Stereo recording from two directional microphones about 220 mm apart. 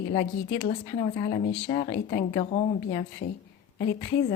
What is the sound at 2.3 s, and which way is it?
Speech, 30° left (ahead or behind).